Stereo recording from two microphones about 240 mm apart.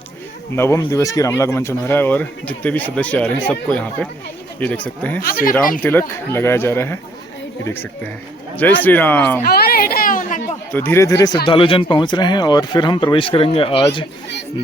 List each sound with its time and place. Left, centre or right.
0.5 s speech: centre
5.2 s speech: left
5.8 s speech: centre
9.4 s children playing: left
10.7 s speech: centre